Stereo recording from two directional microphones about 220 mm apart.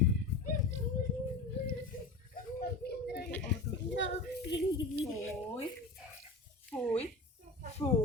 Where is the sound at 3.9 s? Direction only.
50° left (ahead or behind).